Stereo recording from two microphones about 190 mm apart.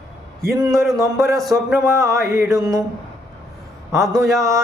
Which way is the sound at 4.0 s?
Centre (ahead or behind).